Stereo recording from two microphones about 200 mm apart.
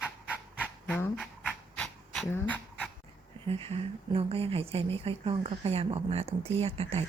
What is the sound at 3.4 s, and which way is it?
Speech, 30° right (ahead or behind).